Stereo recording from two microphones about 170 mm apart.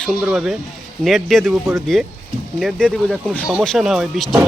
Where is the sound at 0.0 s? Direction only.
5° right (ahead or behind).